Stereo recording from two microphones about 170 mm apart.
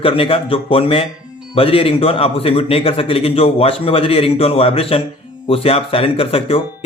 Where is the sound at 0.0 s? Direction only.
30° left (ahead or behind).